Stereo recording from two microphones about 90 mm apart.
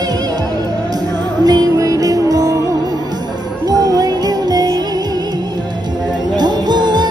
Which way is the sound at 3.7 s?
45° right (ahead or behind).